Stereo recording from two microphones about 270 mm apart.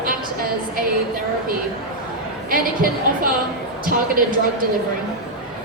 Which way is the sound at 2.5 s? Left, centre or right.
Right.